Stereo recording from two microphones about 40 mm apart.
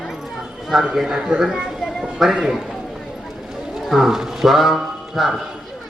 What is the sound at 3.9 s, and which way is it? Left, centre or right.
A man's voice, centre.